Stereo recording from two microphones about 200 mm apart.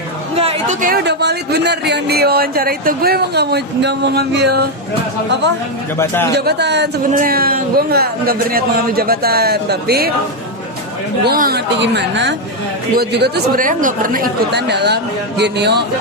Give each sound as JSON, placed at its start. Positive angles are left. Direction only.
{"t": 0.3, "sound": "a sound", "side_deg": -30}
{"t": 0.8, "sound": "speech", "side_deg": -50}
{"t": 6.3, "sound": "speech", "side_deg": -55}
{"t": 7.1, "sound": "speech", "side_deg": -45}
{"t": 11.2, "sound": "speech", "side_deg": -50}